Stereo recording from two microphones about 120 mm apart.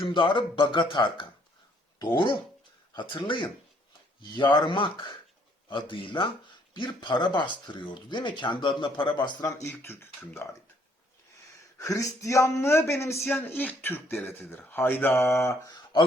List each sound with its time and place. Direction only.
0.0 s speech: 45° left (ahead or behind)
9.5 s speech: 25° left (ahead or behind)
11.8 s speech: 30° left (ahead or behind)